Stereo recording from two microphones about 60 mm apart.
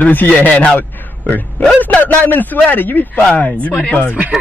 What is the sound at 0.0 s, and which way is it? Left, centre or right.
A man's voice, left.